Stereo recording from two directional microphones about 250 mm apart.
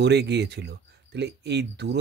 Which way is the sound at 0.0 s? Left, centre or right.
Right.